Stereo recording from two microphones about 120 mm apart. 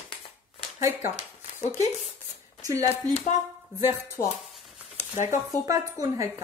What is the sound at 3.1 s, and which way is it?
Speech, 65° left (ahead or behind).